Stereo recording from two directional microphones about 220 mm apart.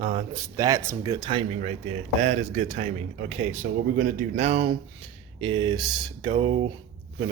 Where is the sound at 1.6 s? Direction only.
30° right (ahead or behind).